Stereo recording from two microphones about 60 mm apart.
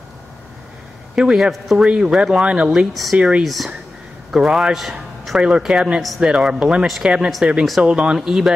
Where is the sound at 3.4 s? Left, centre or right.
Centre.